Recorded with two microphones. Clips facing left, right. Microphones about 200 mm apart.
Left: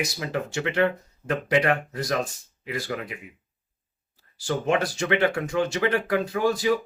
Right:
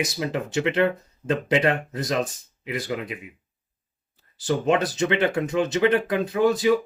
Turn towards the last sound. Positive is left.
turn(degrees=-20)  # may be behind; listen again after turning